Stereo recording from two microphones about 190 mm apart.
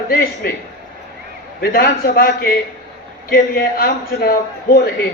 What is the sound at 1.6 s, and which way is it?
A man's voice, 50° left (ahead or behind).